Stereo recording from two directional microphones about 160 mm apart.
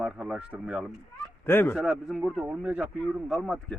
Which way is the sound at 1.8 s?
Centre (ahead or behind).